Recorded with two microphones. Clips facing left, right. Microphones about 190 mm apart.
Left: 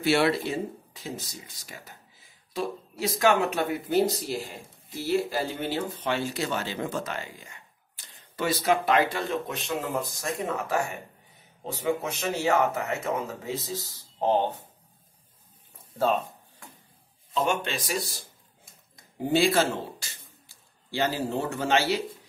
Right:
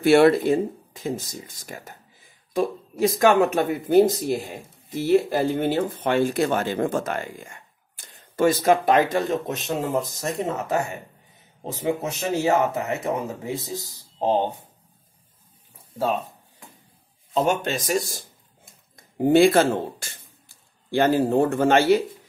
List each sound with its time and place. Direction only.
0.0 s speech: 50° right (ahead or behind)
10.4 s speech: 20° right (ahead or behind)
12.2 s speech: 20° right (ahead or behind)
16.0 s a sound: 10° right (ahead or behind)
17.3 s a man's voice: 40° right (ahead or behind)